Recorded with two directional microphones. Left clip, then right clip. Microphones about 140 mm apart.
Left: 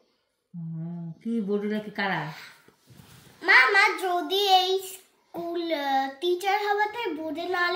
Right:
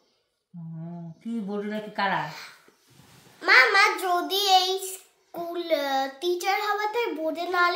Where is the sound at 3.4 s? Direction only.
35° right (ahead or behind).